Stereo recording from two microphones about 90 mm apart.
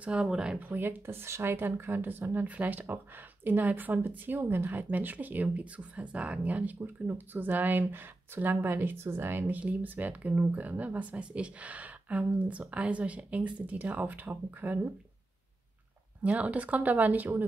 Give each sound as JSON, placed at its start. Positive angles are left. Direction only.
{"t": 0.0, "sound": "speech", "side_deg": -10}
{"t": 0.7, "sound": "speech", "side_deg": -25}
{"t": 16.2, "sound": "speech", "side_deg": -15}